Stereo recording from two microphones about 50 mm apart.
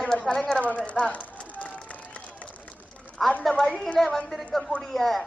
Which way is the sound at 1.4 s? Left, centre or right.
Left.